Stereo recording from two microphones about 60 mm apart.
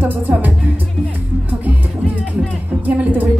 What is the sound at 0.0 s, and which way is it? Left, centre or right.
Music, right.